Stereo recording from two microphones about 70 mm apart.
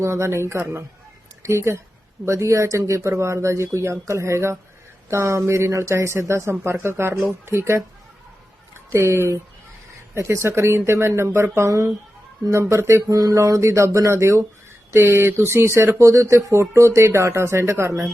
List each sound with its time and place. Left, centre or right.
0.0 s speech: right
8.9 s speech: right